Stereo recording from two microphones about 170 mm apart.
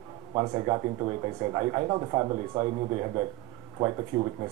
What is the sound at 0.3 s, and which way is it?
A man's voice, 25° right (ahead or behind).